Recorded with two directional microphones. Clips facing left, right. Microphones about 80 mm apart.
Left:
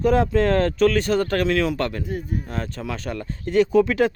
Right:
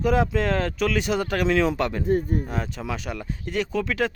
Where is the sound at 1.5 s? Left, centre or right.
Right.